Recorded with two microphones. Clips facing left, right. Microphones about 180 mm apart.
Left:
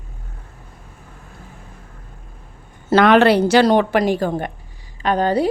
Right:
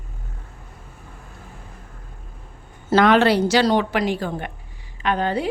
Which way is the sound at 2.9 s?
65° left (ahead or behind).